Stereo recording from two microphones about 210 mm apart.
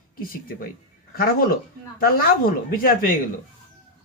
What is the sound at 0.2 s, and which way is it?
A man's voice, 45° left (ahead or behind).